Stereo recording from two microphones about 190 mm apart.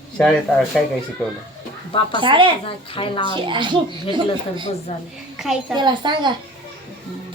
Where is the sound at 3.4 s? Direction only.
25° right (ahead or behind).